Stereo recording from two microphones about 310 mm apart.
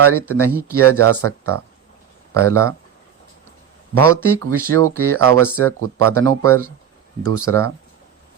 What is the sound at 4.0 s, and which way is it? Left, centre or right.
Speech, right.